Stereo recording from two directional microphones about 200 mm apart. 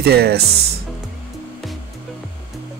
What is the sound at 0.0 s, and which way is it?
Speech, 50° right (ahead or behind).